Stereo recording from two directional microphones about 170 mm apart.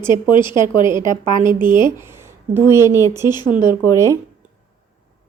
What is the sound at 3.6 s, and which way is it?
Speech, 20° left (ahead or behind).